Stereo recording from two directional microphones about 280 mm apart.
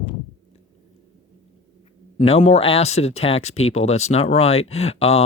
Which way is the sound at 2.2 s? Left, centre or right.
Left.